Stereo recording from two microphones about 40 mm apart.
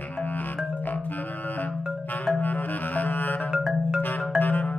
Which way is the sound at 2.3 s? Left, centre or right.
Left.